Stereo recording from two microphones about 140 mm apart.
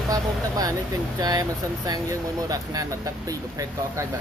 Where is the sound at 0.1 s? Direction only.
25° right (ahead or behind).